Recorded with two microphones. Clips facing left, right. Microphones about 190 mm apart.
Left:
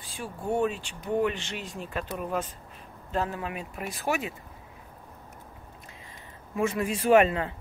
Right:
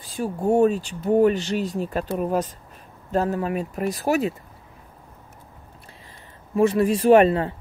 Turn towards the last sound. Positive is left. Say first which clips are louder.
# right 6 dB
turn(degrees=-35)  # may be behind; listen again after turning